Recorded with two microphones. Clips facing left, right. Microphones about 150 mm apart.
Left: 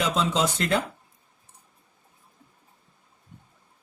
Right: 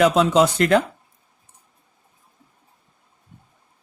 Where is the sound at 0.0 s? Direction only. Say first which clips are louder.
Right 9 dB; 60° right (ahead or behind).